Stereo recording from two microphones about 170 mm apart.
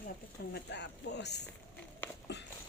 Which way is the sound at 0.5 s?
90° left.